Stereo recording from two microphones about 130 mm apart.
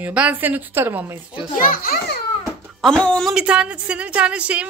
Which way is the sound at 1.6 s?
90° left.